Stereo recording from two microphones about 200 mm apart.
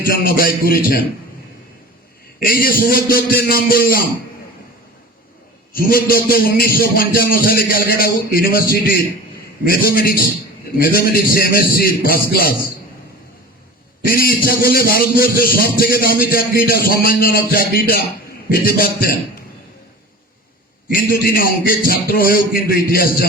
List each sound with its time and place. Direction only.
0.0 s a man's voice: 45° left (ahead or behind)
2.5 s a man's voice: 45° left (ahead or behind)
5.7 s a man's voice: 45° left (ahead or behind)
14.1 s a man's voice: 45° left (ahead or behind)
20.9 s a man's voice: 45° left (ahead or behind)